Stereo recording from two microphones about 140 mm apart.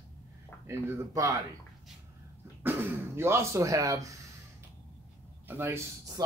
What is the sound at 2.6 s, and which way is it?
Speech, 15° right (ahead or behind).